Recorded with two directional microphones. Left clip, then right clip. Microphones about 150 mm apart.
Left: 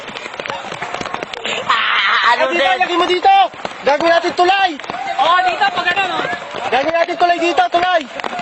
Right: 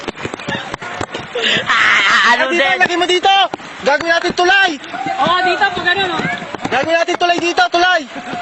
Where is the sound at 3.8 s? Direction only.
30° left (ahead or behind).